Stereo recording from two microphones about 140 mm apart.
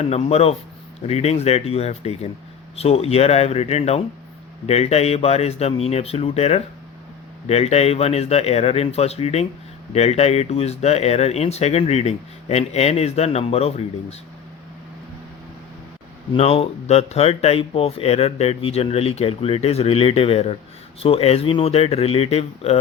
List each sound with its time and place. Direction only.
0.0 s speech: 50° left (ahead or behind)
16.3 s speech: 45° left (ahead or behind)